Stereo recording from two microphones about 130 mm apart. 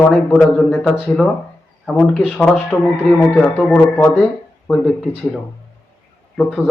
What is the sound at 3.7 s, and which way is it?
Speech, 15° left (ahead or behind).